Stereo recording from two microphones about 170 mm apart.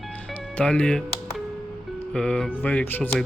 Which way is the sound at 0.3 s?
5° left (ahead or behind).